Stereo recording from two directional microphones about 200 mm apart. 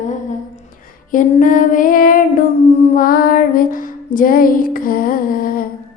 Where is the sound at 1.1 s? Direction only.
40° left (ahead or behind).